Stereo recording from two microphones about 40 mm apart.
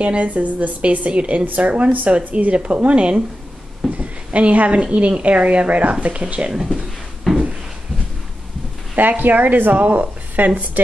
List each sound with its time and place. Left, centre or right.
0.0 s a woman's voice: right
6.5 s speech: centre
7.3 s drawer open or close: centre
8.9 s speech: right